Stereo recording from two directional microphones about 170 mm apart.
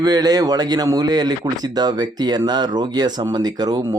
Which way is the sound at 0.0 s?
20° right (ahead or behind).